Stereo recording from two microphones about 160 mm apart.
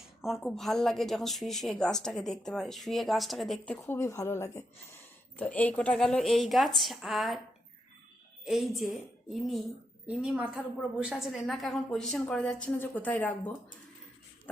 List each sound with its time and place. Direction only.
0.2 s a woman's voice: centre (ahead or behind)
3.8 s a woman's voice: 20° left (ahead or behind); by 7.3 s centre (ahead or behind)
8.4 s a woman's voice: centre (ahead or behind)